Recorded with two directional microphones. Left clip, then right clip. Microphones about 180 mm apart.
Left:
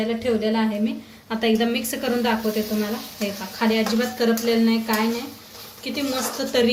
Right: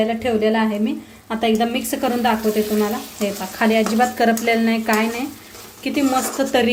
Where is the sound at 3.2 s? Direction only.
45° right (ahead or behind).